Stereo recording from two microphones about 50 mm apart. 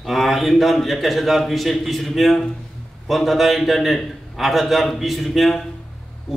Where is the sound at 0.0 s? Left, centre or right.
Centre.